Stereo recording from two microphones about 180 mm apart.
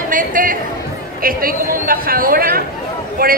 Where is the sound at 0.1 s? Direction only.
50° right (ahead or behind).